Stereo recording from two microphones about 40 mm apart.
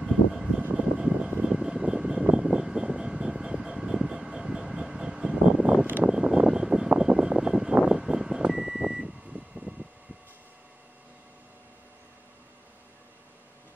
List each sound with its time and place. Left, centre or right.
0.0 s vehicle: centre
0.7 s vehicle: right
1.4 s a sound: centre
6.0 s vehicle: centre
7.8 s a sound: centre
8.5 s vehicle: centre
9.0 s vehicle: right